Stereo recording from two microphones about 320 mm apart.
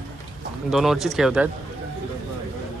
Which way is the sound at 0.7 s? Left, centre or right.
Centre.